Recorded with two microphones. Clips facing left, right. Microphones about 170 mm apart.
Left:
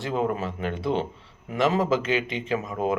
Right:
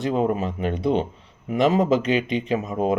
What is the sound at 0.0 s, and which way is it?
Speech, 20° right (ahead or behind).